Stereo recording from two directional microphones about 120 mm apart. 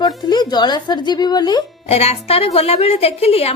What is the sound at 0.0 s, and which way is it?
Speech, 35° left (ahead or behind).